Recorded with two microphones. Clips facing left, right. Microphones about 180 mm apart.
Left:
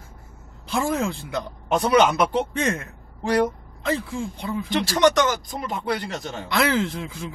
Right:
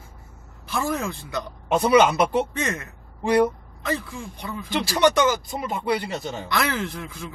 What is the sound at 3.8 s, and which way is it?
Speech, 15° left (ahead or behind).